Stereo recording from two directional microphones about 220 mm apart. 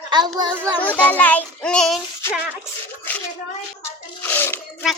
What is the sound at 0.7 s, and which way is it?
A child's voice, 5° left (ahead or behind).